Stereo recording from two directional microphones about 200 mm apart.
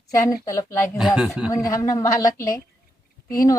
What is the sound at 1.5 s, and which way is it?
Speech, 15° left (ahead or behind).